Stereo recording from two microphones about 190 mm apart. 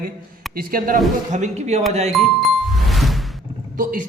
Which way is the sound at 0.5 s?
50° right (ahead or behind).